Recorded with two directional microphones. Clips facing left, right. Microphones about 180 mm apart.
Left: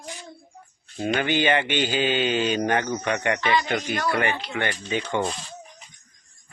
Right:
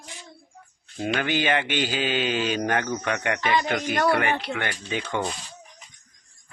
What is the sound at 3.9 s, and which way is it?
Music, 60° right (ahead or behind).